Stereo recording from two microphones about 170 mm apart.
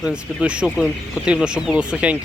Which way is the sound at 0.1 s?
5° right (ahead or behind).